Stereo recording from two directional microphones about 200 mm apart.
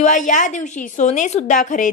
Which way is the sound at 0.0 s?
40° left (ahead or behind).